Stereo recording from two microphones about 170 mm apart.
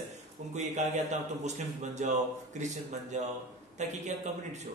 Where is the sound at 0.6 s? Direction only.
45° right (ahead or behind).